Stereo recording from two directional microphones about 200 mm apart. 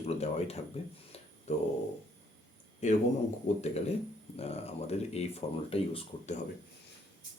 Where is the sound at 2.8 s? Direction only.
35° left (ahead or behind).